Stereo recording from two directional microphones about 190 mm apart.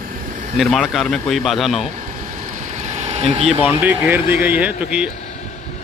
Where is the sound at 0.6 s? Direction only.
Centre (ahead or behind).